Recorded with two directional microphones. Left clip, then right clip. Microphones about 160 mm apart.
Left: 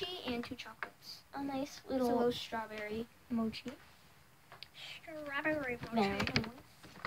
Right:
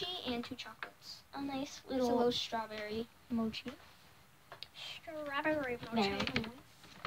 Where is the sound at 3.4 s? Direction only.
15° left (ahead or behind).